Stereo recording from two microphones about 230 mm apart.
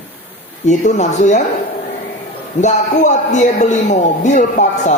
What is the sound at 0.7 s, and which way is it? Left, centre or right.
Speech, left.